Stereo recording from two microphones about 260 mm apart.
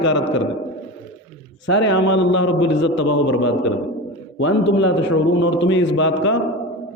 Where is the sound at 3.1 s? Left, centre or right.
Left.